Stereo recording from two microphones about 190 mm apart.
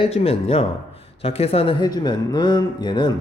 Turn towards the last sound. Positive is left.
turn(degrees=25)  # may be behind; listen again after turning